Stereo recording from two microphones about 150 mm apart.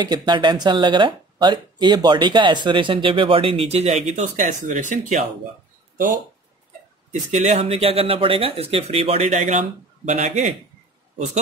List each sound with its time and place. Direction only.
0.0 s speech: 30° right (ahead or behind); by 5.2 s 55° right (ahead or behind)
7.2 s a man's voice: 50° right (ahead or behind)